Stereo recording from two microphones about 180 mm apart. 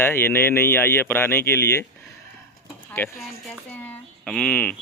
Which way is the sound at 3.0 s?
10° left (ahead or behind).